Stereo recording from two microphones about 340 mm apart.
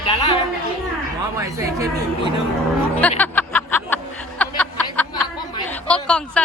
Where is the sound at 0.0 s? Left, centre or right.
Centre.